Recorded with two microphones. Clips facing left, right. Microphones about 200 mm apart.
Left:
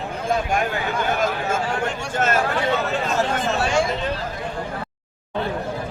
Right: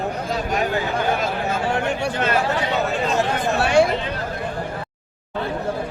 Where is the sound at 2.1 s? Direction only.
45° left (ahead or behind).